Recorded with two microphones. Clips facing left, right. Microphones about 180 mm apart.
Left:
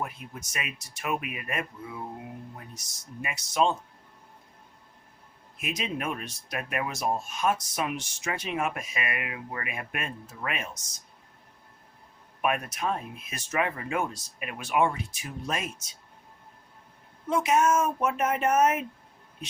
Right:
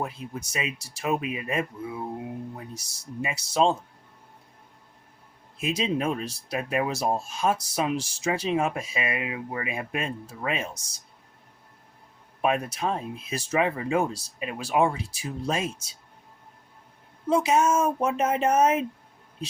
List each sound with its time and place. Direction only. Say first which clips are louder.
0.0 s speech: right 4 dB; 30° right (ahead or behind)
2.7 s speech: right 6 dB; 30° right (ahead or behind)
5.5 s speech: right 6 dB; 30° right (ahead or behind)
12.4 s speech: right 3 dB; 30° right (ahead or behind)
17.2 s speech: right 2 dB; 30° right (ahead or behind)